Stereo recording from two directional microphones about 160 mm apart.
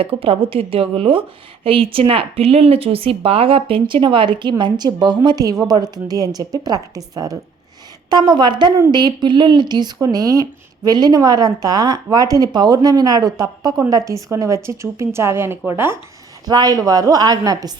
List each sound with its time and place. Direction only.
0.0 s speech: 35° right (ahead or behind); by 16.0 s 15° right (ahead or behind)
16.5 s speech: 25° right (ahead or behind)